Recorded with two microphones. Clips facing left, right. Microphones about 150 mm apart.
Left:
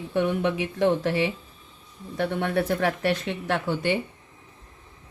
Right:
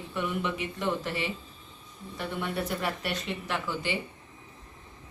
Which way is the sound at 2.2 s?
70° left (ahead or behind).